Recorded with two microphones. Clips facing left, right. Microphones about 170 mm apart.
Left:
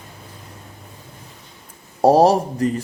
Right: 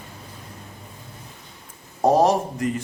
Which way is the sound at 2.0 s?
35° left (ahead or behind).